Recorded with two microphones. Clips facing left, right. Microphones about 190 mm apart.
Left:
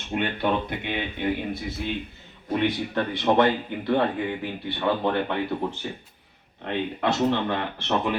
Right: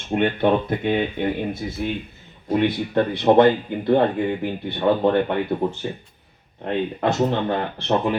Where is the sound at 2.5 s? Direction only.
35° right (ahead or behind).